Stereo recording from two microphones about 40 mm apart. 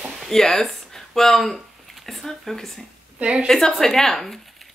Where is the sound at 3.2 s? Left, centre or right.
Right.